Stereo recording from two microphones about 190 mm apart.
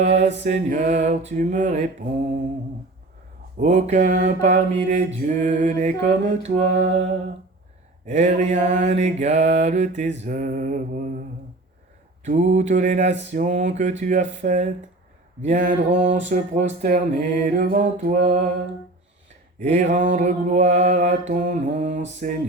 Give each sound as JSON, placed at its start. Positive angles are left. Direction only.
{"t": 0.0, "sound": "mantra", "side_deg": -35}
{"t": 3.6, "sound": "mantra", "side_deg": -40}
{"t": 8.0, "sound": "mantra", "side_deg": -35}
{"t": 12.2, "sound": "mantra", "side_deg": -40}
{"t": 19.6, "sound": "mantra", "side_deg": -40}